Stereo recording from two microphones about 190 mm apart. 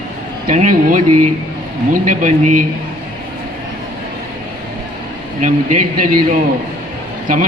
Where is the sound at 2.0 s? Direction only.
45° right (ahead or behind).